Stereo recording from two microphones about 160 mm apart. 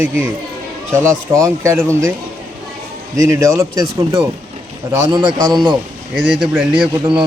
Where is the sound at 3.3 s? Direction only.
20° right (ahead or behind).